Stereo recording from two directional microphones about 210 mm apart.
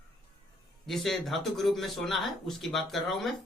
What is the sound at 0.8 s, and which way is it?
Speech, centre (ahead or behind).